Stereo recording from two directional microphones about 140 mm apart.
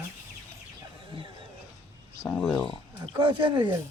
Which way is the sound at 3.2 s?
35° right (ahead or behind).